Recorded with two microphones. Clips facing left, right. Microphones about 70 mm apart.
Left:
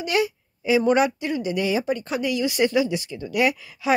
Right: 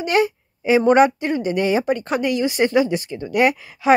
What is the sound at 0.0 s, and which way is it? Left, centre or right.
A woman's voice, right.